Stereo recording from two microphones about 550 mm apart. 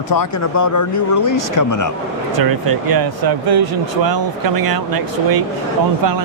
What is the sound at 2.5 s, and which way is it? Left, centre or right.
Speech, right.